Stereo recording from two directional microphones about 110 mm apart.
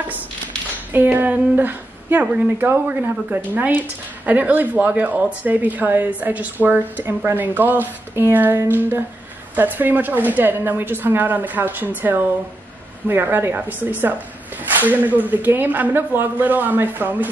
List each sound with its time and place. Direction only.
0.9 s speech: 15° right (ahead or behind)